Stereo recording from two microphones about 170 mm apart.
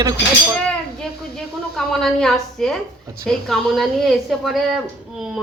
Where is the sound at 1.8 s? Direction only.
Centre (ahead or behind).